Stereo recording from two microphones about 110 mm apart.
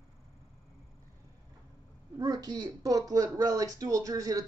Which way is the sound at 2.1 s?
35° right (ahead or behind).